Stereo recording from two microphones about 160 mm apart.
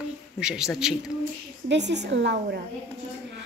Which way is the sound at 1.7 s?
90° right.